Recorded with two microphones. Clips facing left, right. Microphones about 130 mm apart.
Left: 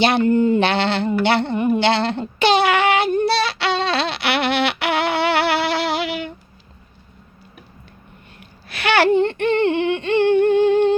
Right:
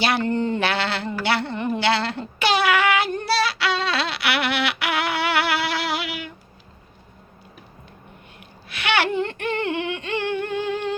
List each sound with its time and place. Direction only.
0.0 s female singing: 25° left (ahead or behind)
0.3 s mantra: 10° left (ahead or behind)
0.6 s female singing: 25° left (ahead or behind)
1.5 s mantra: 15° left (ahead or behind)
1.8 s female singing: 25° left (ahead or behind)
3.1 s child singing: 20° left (ahead or behind)
8.7 s a sound: 35° left (ahead or behind)
9.1 s music: 25° left (ahead or behind)